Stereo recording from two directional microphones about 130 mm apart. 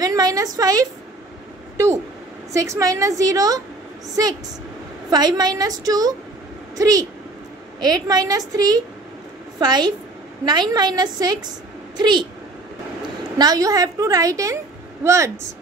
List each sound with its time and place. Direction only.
0.0 s a woman's voice: 30° right (ahead or behind)
2.5 s a woman's voice: 25° right (ahead or behind)
13.4 s a woman's voice: 30° right (ahead or behind)